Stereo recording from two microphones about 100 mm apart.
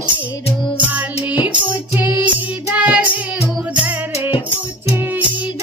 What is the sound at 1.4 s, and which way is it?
Music, 20° right (ahead or behind).